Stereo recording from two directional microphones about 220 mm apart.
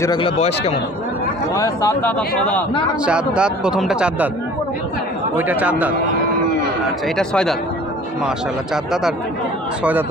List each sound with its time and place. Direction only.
0.0 s speech: 20° left (ahead or behind)
0.4 s speech: 30° left (ahead or behind)
1.5 s a man's voice: 15° left (ahead or behind)
3.1 s speech: 5° right (ahead or behind)
5.3 s a man's voice: 10° right (ahead or behind)
7.2 s speech: 5° left (ahead or behind)